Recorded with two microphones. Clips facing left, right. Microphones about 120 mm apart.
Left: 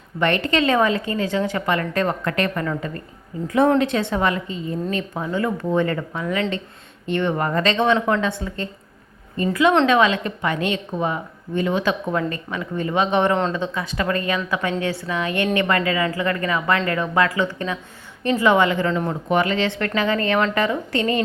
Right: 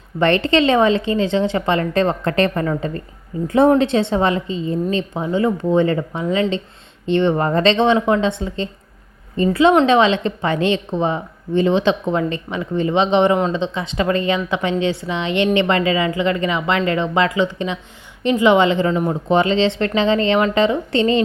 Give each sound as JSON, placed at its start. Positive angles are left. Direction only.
{"t": 0.2, "sound": "a woman's voice", "side_deg": -30}